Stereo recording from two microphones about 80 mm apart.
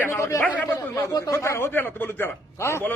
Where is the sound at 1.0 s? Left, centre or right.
Left.